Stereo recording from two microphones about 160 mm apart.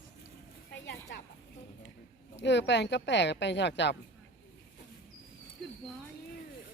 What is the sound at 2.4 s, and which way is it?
Speech, 90° left.